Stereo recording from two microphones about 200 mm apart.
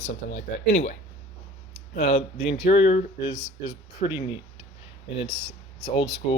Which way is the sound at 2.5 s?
30° left (ahead or behind).